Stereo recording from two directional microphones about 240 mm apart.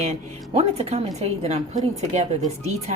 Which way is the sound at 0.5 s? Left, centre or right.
Right.